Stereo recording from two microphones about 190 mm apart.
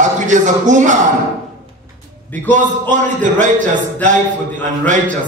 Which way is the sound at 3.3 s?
40° right (ahead or behind).